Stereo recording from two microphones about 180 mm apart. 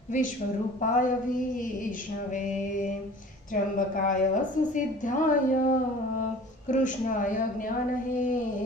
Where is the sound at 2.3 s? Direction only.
45° left (ahead or behind).